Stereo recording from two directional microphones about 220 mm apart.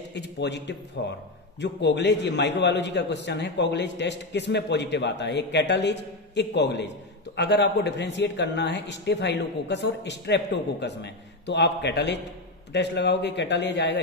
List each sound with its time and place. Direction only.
0.1 s a man's voice: 50° left (ahead or behind)